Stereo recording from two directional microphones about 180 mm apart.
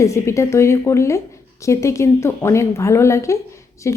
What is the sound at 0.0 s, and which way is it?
A woman's voice, 15° left (ahead or behind).